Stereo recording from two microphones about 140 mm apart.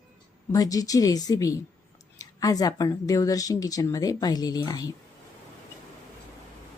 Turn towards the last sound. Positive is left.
turn(degrees=25)  # may be behind; listen again after turning